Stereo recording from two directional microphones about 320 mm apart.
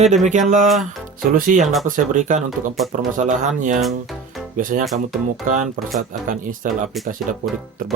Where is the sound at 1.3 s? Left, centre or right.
Right.